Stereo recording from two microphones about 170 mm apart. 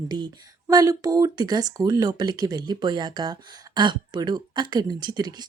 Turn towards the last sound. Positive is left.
turn(degrees=-25)  # may be behind; listen again after turning